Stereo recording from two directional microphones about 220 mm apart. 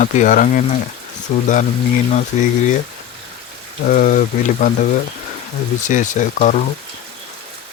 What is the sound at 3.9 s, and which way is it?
Speech, 40° left (ahead or behind).